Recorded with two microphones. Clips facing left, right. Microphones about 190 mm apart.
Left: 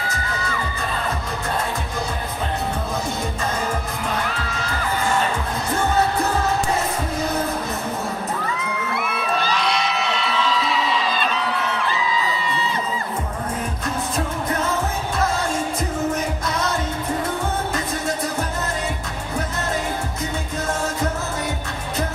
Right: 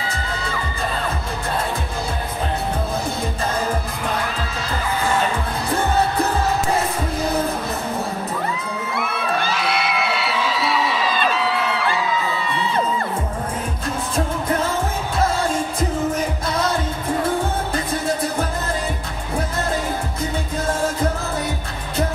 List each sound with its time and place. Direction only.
9.5 s a sound: 5° right (ahead or behind)
12.2 s music: 55° right (ahead or behind)
16.4 s music: 30° right (ahead or behind)